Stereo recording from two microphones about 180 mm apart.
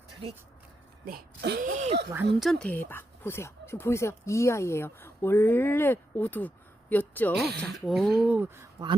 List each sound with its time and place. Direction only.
1.0 s speech: 60° right (ahead or behind)
1.6 s speech: 40° right (ahead or behind)
2.4 s speech: 5° left (ahead or behind)
7.3 s speech: 65° right (ahead or behind)
7.6 s speech: centre (ahead or behind)